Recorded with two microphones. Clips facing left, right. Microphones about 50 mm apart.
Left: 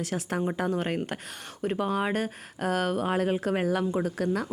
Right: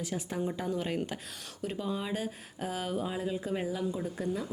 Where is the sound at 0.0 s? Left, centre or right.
Left.